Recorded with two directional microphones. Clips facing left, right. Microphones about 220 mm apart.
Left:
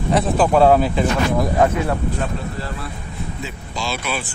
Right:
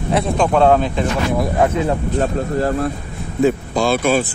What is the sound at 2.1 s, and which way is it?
Speech, 45° right (ahead or behind).